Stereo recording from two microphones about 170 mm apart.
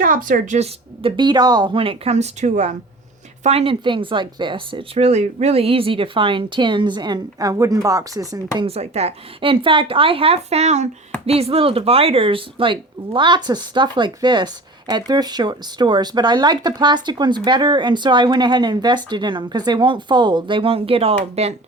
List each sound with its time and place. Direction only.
0.0 s speech: 55° right (ahead or behind); by 8.4 s 20° right (ahead or behind)
8.5 s speech: 35° right (ahead or behind)